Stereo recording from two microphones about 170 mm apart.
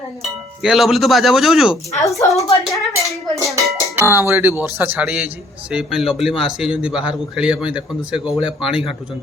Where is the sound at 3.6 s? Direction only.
15° right (ahead or behind).